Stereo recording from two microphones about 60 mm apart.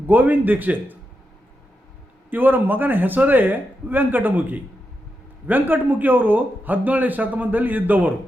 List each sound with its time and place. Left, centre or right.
0.0 s a man's voice: right
2.3 s a man's voice: right